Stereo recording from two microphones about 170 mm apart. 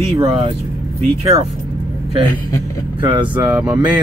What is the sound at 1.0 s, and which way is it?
Speech, 40° right (ahead or behind).